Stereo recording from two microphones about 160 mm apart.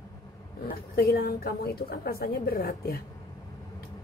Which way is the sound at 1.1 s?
75° left (ahead or behind).